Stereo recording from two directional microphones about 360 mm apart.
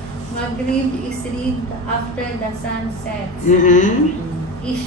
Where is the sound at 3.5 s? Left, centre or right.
Left.